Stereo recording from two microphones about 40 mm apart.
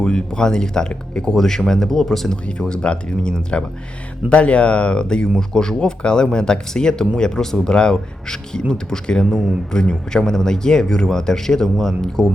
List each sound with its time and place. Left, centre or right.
0.0 s speech: centre
2.3 s speech: left
10.1 s speech: centre